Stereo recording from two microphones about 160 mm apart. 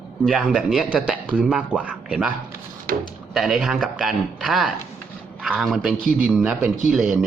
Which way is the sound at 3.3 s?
Centre (ahead or behind).